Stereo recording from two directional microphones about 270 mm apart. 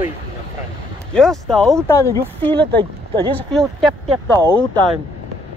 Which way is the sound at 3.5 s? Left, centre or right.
Centre.